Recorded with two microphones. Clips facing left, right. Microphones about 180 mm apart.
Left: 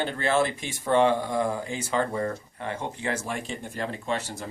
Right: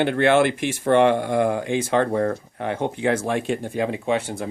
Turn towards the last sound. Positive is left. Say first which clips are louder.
# right 7 dB
turn(degrees=-55)  # may be behind; listen again after turning